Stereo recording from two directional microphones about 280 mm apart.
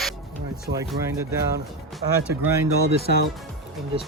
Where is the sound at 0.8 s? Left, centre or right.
Centre.